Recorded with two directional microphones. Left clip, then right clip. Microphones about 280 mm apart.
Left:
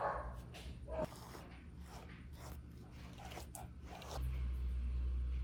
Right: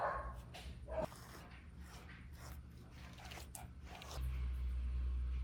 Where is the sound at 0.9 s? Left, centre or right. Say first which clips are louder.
Even; centre.